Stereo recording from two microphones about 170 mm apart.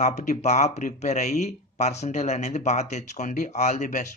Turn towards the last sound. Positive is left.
turn(degrees=45)  # may be behind; listen again after turning